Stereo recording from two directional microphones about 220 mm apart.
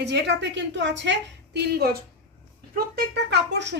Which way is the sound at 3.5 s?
55° right (ahead or behind).